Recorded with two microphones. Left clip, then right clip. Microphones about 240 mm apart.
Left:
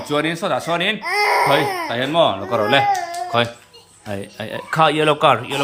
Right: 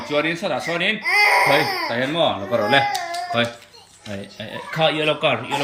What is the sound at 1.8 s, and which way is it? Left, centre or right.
Speech, centre.